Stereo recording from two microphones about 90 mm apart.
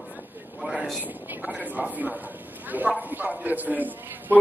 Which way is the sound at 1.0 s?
20° right (ahead or behind).